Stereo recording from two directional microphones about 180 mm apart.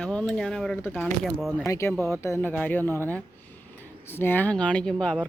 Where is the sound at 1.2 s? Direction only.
Centre (ahead or behind).